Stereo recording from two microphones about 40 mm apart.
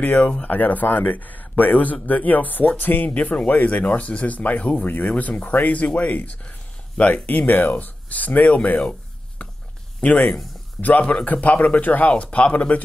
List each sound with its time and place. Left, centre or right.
0.0 s speech: left
0.4 s speech: left
9.4 s a sound: left
10.0 s speech: left
12.1 s speech: left